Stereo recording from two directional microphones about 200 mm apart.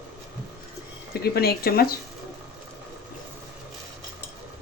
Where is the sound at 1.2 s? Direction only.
50° left (ahead or behind).